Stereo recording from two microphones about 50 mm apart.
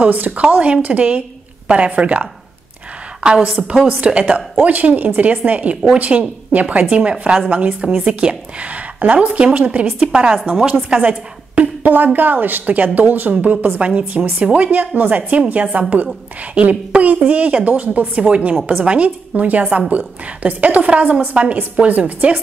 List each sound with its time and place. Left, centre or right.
0.0 s a woman's voice: right
4.6 s a woman's voice: right
9.9 s a woman's voice: centre
10.9 s a woman's voice: right
11.9 s a woman's voice: right
16.9 s a woman's voice: right